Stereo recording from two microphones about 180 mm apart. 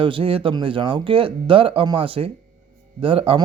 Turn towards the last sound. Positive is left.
turn(degrees=-30)  # may be behind; listen again after turning